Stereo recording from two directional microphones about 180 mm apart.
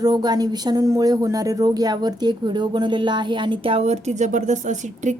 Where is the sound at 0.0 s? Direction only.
20° right (ahead or behind).